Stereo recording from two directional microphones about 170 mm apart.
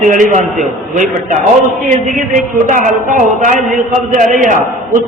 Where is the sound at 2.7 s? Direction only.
50° right (ahead or behind).